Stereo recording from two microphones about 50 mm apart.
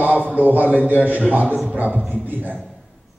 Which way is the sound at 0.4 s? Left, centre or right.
Right.